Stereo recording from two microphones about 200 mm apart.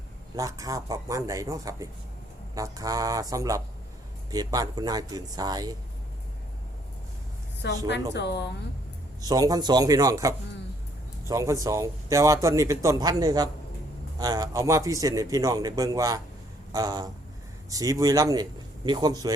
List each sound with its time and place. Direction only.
0.3 s a man's voice: 15° right (ahead or behind)
7.6 s a woman's voice: 55° left (ahead or behind)
9.2 s a man's voice: 20° right (ahead or behind)